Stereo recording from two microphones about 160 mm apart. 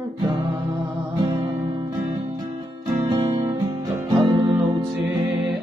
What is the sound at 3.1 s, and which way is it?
Music, 25° right (ahead or behind).